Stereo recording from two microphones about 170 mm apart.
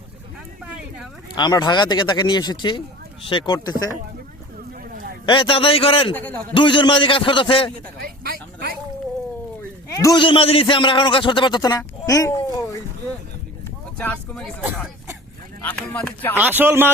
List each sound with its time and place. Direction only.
1.4 s speech: 25° left (ahead or behind)
5.2 s a man's voice: 30° left (ahead or behind)
6.1 s speech: 10° left (ahead or behind)
6.5 s speech: 30° left (ahead or behind)
7.9 s speech: 65° right (ahead or behind)
9.9 s a man's voice: 20° left (ahead or behind)
14.0 s speech: 5° left (ahead or behind)
15.6 s speech: 10° left (ahead or behind)
16.4 s speech: 10° right (ahead or behind)